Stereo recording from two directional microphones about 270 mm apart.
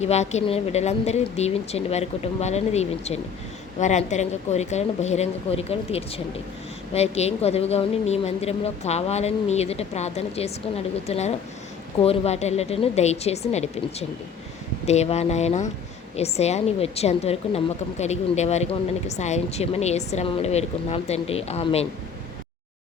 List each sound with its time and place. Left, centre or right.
0.0 s a woman's voice: left
14.8 s a woman's voice: left